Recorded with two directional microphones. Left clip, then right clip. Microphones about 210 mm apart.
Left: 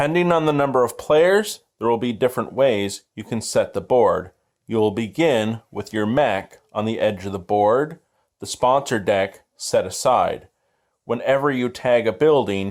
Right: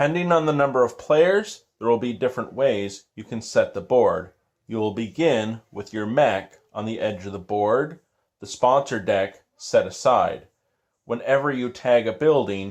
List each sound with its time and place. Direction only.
0.0 s speech: 45° left (ahead or behind)